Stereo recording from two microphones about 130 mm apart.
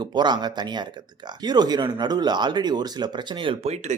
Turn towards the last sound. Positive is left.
turn(degrees=-40)  # may be behind; listen again after turning